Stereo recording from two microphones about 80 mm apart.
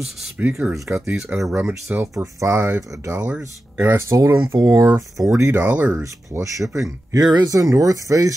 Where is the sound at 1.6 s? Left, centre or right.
Right.